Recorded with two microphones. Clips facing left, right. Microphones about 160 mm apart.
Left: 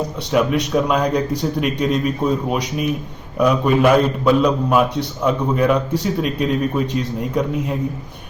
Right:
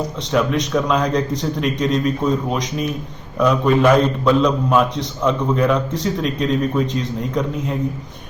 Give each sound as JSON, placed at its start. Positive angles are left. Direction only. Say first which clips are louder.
{"t": 0.2, "sound": "a man's voice", "louder": "left 1 dB", "side_deg": 10}